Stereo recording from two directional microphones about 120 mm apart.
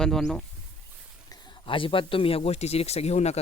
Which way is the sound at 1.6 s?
45° left (ahead or behind).